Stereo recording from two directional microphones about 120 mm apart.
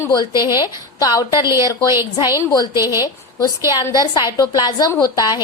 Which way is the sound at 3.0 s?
30° left (ahead or behind).